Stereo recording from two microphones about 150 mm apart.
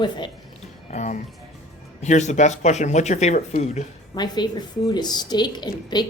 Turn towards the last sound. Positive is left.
turn(degrees=30)  # may be behind; listen again after turning